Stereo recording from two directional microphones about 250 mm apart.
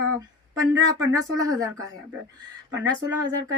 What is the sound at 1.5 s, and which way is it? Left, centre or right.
Speech, centre.